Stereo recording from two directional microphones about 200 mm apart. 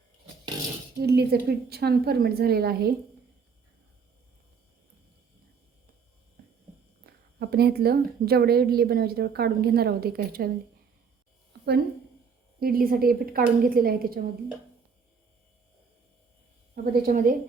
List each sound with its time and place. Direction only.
1.0 s a woman's voice: 55° right (ahead or behind)
7.0 s a woman's voice: 50° right (ahead or behind)
12.5 s a woman's voice: 45° right (ahead or behind)
16.7 s a woman's voice: 50° right (ahead or behind)